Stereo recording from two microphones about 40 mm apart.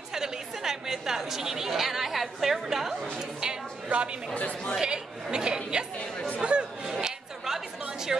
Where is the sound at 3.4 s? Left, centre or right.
Right.